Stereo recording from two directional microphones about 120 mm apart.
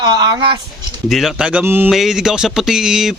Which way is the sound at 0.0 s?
35° right (ahead or behind).